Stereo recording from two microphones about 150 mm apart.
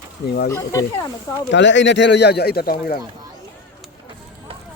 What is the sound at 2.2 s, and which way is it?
Speech, 90° left.